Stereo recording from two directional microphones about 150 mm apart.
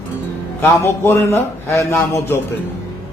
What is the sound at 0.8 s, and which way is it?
A man's voice, 15° left (ahead or behind).